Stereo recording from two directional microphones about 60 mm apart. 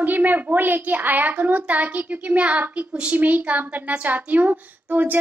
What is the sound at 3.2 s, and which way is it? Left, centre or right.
Speech, right.